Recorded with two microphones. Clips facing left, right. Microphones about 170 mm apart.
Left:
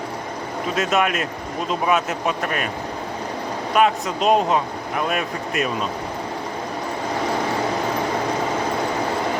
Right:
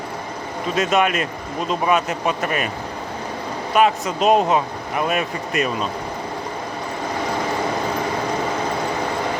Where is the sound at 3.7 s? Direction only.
Centre (ahead or behind).